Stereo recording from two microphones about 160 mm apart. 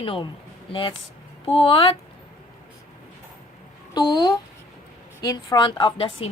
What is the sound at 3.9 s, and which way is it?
A woman's voice, 25° left (ahead or behind).